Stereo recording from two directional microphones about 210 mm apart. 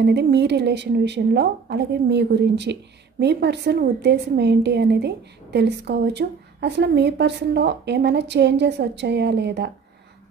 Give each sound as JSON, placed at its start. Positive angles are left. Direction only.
{"t": 0.0, "sound": "a woman's voice", "side_deg": -55}